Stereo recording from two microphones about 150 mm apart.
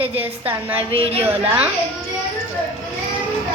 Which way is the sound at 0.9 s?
40° right (ahead or behind).